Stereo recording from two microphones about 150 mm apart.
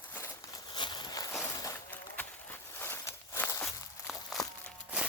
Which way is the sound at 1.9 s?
10° left (ahead or behind).